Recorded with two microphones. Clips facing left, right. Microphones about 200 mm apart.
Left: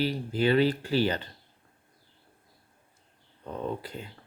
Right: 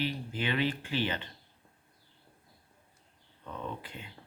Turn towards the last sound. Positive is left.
turn(degrees=40)  # may be behind; listen again after turning